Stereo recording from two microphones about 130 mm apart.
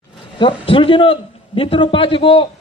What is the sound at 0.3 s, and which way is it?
A man's voice, 40° left (ahead or behind).